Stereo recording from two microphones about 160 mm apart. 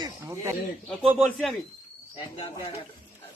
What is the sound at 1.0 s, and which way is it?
Speech, 5° right (ahead or behind).